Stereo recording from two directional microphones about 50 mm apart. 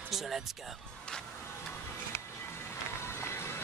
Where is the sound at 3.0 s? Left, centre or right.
Left.